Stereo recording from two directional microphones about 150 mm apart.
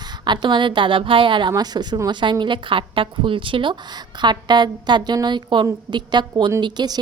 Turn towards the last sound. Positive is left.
turn(degrees=-30)  # may be behind; listen again after turning